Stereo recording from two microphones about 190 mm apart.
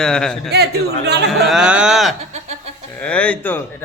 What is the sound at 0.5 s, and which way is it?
Speech, 60° right (ahead or behind).